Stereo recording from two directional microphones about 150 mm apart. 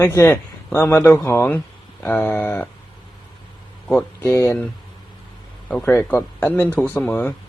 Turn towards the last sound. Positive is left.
turn(degrees=10)  # may be behind; listen again after turning